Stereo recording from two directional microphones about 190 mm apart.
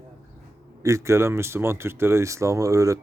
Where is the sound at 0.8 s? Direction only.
15° right (ahead or behind).